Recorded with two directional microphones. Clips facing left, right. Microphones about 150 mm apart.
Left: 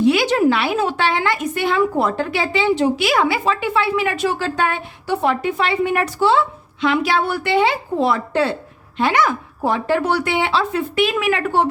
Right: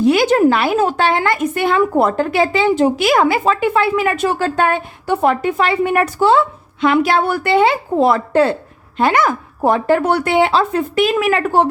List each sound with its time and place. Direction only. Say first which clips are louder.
0.0 s a woman's voice: right 3 dB; 45° right (ahead or behind)